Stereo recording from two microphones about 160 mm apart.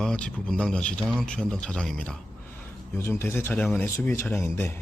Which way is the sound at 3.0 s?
15° left (ahead or behind).